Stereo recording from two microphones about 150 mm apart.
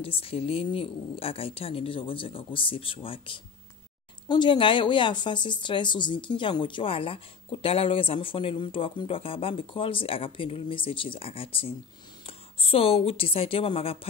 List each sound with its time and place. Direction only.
0.0 s a woman's voice: 40° left (ahead or behind)